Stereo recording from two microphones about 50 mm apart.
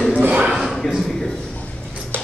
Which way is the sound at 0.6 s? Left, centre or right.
Centre.